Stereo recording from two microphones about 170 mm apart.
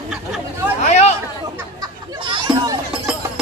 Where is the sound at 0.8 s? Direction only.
40° left (ahead or behind).